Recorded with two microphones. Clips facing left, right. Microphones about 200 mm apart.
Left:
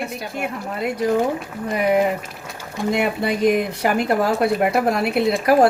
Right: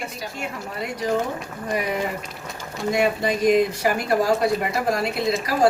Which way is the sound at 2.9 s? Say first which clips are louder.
Even; 60° left (ahead or behind).